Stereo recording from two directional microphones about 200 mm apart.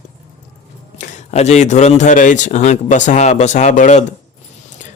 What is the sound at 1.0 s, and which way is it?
A man's voice, 35° left (ahead or behind).